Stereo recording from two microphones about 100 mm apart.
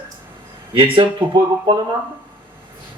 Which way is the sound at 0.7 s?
60° right (ahead or behind).